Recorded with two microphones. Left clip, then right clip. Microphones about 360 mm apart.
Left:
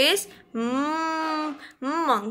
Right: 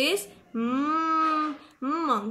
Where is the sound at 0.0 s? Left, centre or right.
Centre.